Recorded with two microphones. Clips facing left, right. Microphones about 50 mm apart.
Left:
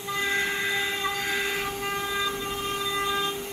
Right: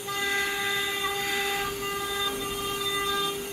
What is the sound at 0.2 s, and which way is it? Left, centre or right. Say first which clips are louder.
Train: left 1 dB; centre.